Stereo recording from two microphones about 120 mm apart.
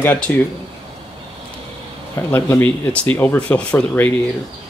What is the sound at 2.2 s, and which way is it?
Speech, 20° left (ahead or behind).